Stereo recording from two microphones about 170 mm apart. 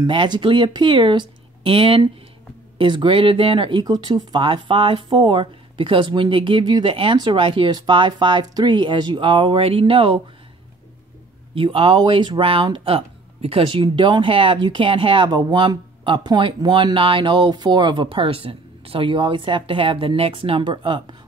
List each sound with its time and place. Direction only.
0.0 s speech: 25° right (ahead or behind)
11.5 s speech: 30° right (ahead or behind)